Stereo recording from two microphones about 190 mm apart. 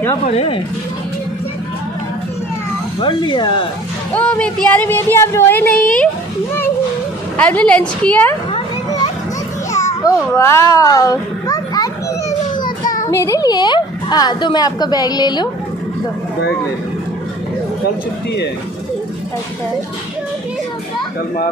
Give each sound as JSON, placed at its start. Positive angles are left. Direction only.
{"t": 0.2, "sound": "speech", "side_deg": 35}
{"t": 3.0, "sound": "a woman's voice", "side_deg": 25}
{"t": 4.1, "sound": "speech", "side_deg": 5}
{"t": 7.3, "sound": "speech", "side_deg": 5}
{"t": 8.5, "sound": "a sound", "side_deg": 30}
{"t": 10.0, "sound": "a child's voice", "side_deg": 15}
{"t": 13.1, "sound": "a woman's voice", "side_deg": 15}